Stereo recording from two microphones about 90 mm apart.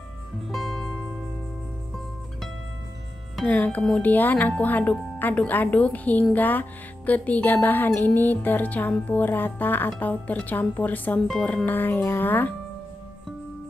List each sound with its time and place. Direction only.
0.5 s music: 5° left (ahead or behind)
3.4 s speech: 20° left (ahead or behind)